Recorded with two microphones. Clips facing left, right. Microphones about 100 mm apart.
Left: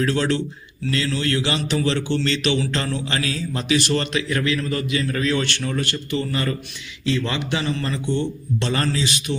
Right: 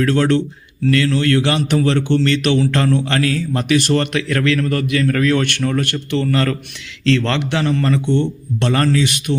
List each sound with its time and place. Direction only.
0.0 s a man's voice: 55° right (ahead or behind)